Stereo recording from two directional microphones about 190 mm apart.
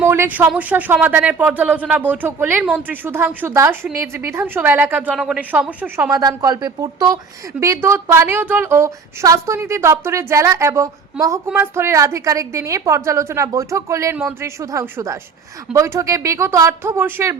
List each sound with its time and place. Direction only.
0.0 s a woman's voice: 10° right (ahead or behind)